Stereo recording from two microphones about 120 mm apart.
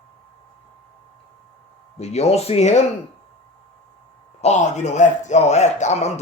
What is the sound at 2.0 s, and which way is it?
Speech, 65° left (ahead or behind).